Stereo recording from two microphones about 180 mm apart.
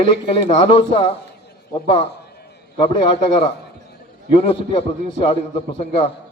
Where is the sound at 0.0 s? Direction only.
30° left (ahead or behind).